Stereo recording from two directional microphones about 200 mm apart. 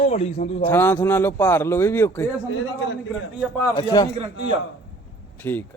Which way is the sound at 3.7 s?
20° left (ahead or behind).